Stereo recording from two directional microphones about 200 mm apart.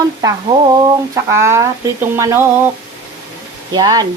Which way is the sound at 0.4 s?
15° right (ahead or behind).